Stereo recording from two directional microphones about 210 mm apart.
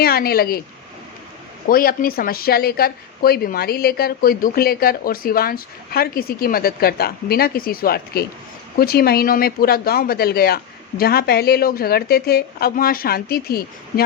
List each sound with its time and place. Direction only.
0.0 s a woman's voice: 45° left (ahead or behind)
1.6 s a woman's voice: 45° left (ahead or behind)